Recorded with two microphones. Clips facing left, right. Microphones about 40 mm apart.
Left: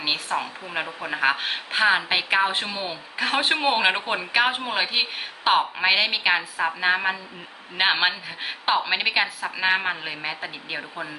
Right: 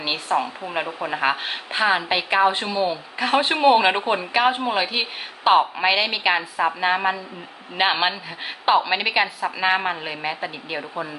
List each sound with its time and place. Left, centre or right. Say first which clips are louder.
0.0 s a woman's voice: right 3 dB; centre